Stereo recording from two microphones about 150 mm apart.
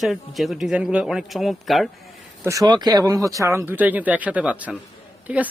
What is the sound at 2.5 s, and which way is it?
Speech, 25° right (ahead or behind).